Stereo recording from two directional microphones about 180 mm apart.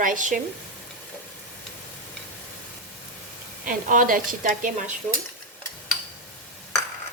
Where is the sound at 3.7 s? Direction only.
50° right (ahead or behind).